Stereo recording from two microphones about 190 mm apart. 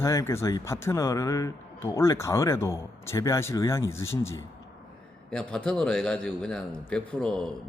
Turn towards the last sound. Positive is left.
turn(degrees=5)  # may be behind; listen again after turning